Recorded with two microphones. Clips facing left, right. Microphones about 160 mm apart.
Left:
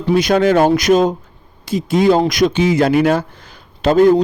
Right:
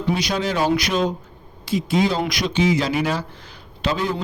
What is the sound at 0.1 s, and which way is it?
A man's voice, 55° left (ahead or behind).